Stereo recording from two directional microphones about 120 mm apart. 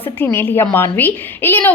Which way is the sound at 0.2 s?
20° left (ahead or behind).